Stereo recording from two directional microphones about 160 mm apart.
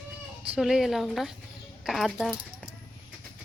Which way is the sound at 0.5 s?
5° right (ahead or behind).